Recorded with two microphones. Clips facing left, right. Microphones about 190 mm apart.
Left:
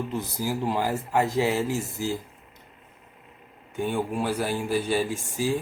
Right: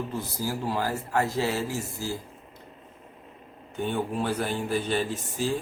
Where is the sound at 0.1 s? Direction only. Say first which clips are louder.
Left 2 dB; 15° left (ahead or behind).